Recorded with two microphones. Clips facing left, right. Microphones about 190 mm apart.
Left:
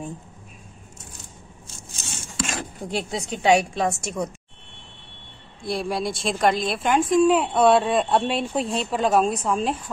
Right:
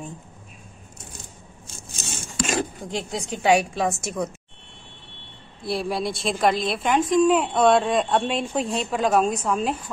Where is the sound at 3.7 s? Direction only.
5° right (ahead or behind).